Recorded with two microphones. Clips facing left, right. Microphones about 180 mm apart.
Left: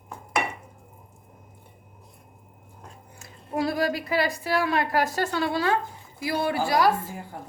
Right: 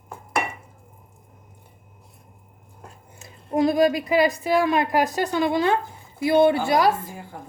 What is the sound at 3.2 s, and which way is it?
A woman's voice, 20° right (ahead or behind).